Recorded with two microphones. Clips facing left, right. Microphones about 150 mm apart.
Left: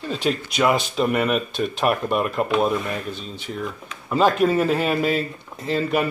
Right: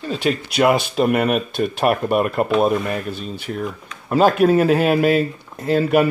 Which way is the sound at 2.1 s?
50° right (ahead or behind).